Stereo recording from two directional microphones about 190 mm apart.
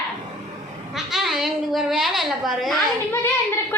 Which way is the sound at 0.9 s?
Centre (ahead or behind).